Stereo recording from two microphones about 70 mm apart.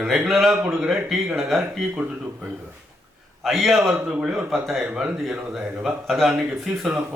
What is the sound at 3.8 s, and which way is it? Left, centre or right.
A man's voice, centre.